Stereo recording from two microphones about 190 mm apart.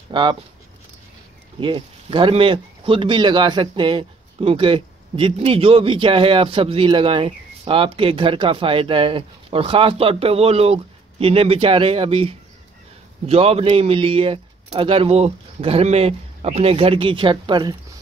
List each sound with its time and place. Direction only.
0.1 s speech: 25° right (ahead or behind)
1.6 s speech: 25° right (ahead or behind)